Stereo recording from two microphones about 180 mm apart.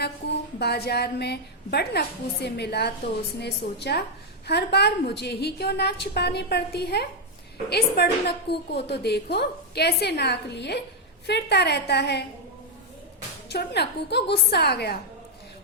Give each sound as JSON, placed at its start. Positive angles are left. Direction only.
{"t": 0.6, "sound": "a woman's voice", "side_deg": 65}
{"t": 13.5, "sound": "a woman's voice", "side_deg": 65}